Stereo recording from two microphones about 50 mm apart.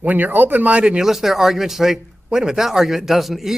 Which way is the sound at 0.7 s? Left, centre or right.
Centre.